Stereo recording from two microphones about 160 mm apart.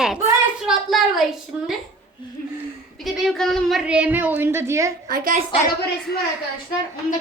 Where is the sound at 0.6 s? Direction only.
Centre (ahead or behind).